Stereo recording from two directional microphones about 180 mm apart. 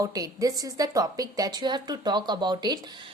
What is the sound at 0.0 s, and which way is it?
A woman's voice, 20° right (ahead or behind).